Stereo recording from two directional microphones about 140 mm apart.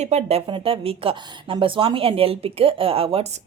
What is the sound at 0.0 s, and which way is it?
A woman's voice, 50° right (ahead or behind).